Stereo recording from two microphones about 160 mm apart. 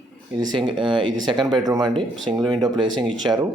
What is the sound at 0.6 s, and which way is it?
Speech, 30° right (ahead or behind).